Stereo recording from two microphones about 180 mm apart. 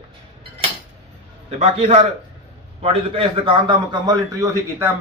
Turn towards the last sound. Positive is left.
turn(degrees=-15)  # may be behind; listen again after turning